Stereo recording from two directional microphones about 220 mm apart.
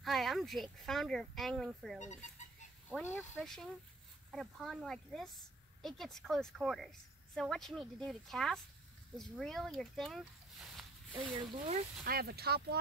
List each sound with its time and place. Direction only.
0.0 s speech: centre (ahead or behind)
3.0 s speech: 10° left (ahead or behind)
11.1 s speech: 20° right (ahead or behind)
12.0 s speech: 45° right (ahead or behind)